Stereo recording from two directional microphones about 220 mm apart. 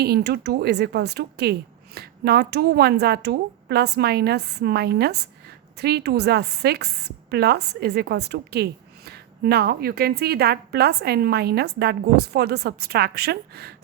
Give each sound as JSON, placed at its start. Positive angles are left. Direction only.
{"t": 0.0, "sound": "a woman's voice", "side_deg": -45}